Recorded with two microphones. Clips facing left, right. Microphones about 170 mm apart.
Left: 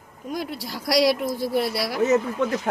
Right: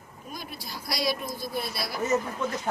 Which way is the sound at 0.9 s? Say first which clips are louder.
Left 10 dB; 75° left (ahead or behind).